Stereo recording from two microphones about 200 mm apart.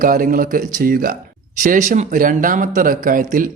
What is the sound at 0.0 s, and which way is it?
Speech, 45° right (ahead or behind).